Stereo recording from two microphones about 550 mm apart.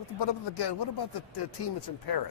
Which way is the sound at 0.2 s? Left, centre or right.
Left.